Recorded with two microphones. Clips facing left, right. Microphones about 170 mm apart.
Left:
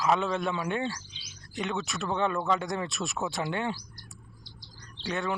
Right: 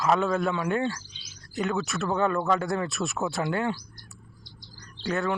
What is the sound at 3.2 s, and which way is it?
Speech, 20° left (ahead or behind).